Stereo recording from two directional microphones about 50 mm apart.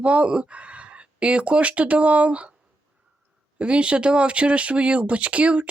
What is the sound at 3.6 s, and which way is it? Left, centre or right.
Speech, right.